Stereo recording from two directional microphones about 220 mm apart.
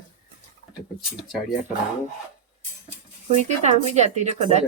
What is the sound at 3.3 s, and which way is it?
Speech, 30° right (ahead or behind).